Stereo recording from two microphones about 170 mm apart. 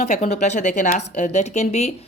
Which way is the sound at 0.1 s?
40° left (ahead or behind).